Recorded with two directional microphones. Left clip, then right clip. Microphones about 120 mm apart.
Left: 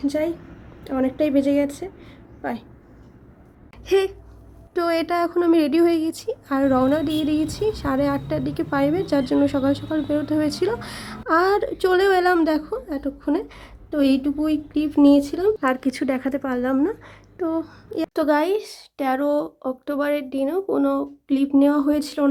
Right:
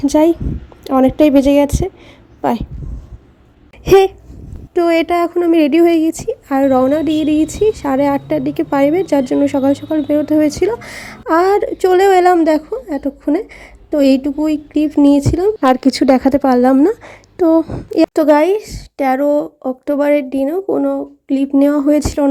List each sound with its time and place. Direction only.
0.0 s a woman's voice: 55° right (ahead or behind)
3.8 s a sound: 45° right (ahead or behind)
4.7 s speech: 30° right (ahead or behind); by 17.6 s 55° right (ahead or behind)
17.6 s speech: 35° right (ahead or behind)
21.6 s speech: 40° right (ahead or behind)